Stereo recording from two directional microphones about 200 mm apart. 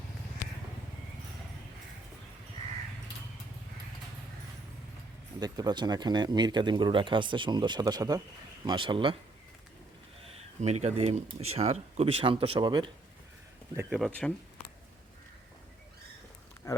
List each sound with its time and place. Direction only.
5.4 s speech: 20° right (ahead or behind)
10.6 s speech: 35° right (ahead or behind)
13.7 s speech: centre (ahead or behind)